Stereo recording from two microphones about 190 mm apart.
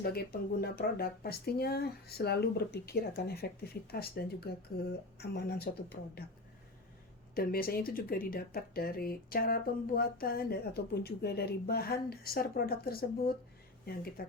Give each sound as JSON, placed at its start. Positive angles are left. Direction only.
{"t": 0.0, "sound": "speech", "side_deg": 55}
{"t": 7.3, "sound": "speech", "side_deg": 50}